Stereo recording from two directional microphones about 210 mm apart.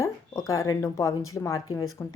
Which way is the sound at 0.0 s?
15° left (ahead or behind).